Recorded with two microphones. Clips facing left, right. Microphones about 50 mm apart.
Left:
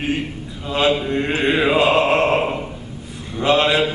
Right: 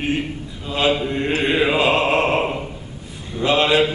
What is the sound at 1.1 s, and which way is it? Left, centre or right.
Mantra, left.